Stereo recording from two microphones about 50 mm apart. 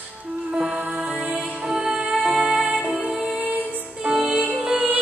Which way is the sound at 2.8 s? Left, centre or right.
Centre.